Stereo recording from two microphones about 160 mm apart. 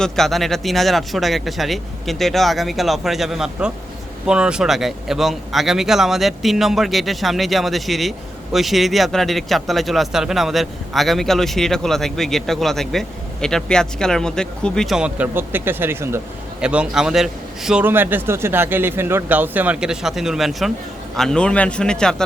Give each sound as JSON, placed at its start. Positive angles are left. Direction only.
{"t": 0.0, "sound": "speech", "side_deg": 0}